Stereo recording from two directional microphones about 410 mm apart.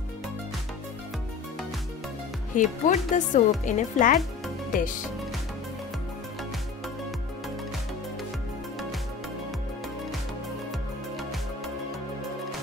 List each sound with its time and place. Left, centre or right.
2.5 s speech: centre